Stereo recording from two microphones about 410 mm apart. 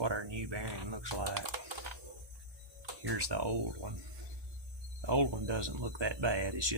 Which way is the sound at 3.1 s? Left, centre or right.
Right.